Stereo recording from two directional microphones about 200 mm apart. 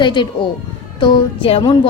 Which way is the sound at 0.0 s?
20° left (ahead or behind).